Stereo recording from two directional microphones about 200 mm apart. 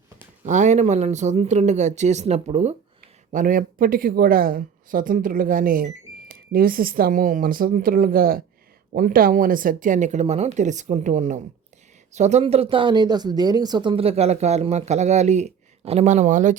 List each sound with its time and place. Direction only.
0.4 s a woman's voice: 35° right (ahead or behind)